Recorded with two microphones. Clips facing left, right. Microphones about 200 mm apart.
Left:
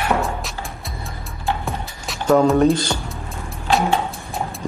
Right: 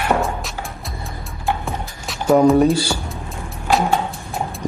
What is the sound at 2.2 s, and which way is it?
Speech, 15° right (ahead or behind).